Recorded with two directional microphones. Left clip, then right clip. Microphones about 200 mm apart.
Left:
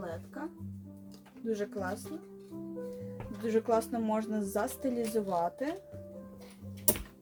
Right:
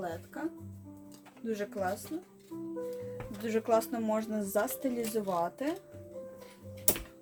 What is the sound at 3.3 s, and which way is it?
Speech, 20° right (ahead or behind).